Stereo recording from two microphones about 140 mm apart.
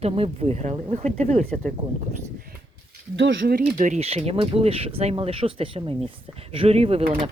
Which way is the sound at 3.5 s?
80° right.